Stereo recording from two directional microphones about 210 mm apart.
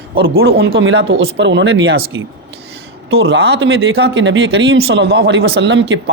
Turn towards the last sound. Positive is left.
turn(degrees=-60)  # may be behind; listen again after turning